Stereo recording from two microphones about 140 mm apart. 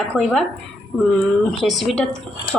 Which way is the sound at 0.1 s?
5° right (ahead or behind).